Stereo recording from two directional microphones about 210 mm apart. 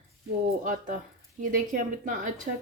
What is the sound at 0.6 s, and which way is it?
Speech, 40° right (ahead or behind).